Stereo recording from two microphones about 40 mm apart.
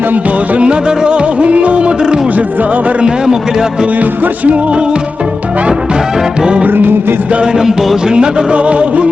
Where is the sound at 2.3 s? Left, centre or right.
Right.